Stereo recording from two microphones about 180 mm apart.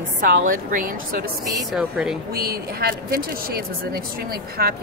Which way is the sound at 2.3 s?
60° right (ahead or behind).